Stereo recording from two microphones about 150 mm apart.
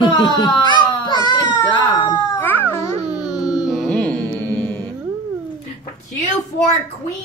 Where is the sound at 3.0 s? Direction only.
5° right (ahead or behind).